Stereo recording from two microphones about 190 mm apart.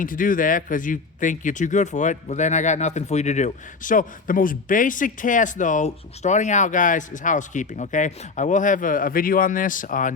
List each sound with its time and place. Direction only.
0.0 s speech: 45° left (ahead or behind)